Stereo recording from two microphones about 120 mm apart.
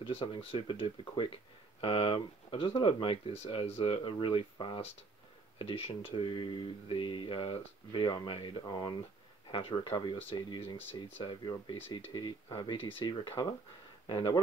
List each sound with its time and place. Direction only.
0.0 s speech: 45° left (ahead or behind)